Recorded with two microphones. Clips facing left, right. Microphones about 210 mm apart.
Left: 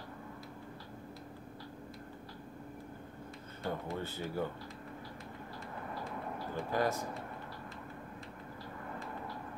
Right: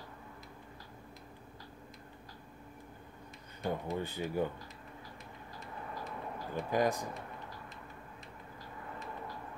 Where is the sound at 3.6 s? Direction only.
15° right (ahead or behind).